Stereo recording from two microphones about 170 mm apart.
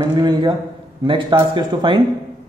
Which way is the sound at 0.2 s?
25° right (ahead or behind).